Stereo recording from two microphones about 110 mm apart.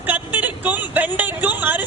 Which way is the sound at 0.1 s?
15° right (ahead or behind).